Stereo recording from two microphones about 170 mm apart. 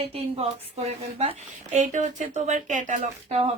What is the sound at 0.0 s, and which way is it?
A woman's voice, 35° right (ahead or behind).